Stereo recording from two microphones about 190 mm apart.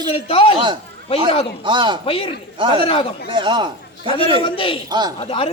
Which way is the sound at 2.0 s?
30° left (ahead or behind).